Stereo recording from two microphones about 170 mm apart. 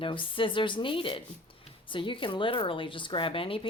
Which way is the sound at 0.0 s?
30° left (ahead or behind).